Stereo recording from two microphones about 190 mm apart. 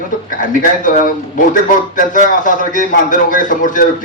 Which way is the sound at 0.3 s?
45° left (ahead or behind).